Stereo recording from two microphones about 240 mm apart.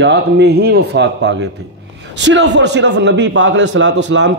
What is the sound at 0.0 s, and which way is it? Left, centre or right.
A man's voice, right.